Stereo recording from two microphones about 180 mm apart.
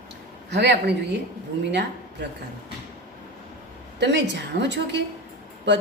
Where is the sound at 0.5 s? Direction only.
65° right (ahead or behind).